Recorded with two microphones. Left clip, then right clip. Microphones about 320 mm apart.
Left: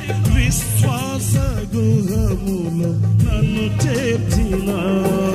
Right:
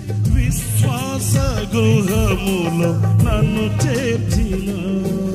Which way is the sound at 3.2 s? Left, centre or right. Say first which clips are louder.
Right 3 dB; centre.